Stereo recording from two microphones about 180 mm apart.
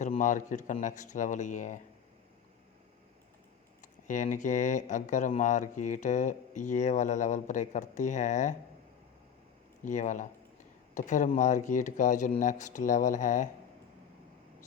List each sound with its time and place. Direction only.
0.0 s speech: 45° left (ahead or behind)
3.8 s speech: 45° left (ahead or behind)
9.8 s speech: 45° left (ahead or behind)